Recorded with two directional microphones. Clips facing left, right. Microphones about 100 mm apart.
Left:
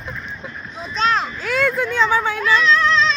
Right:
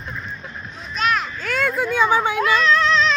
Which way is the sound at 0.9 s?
25° left (ahead or behind).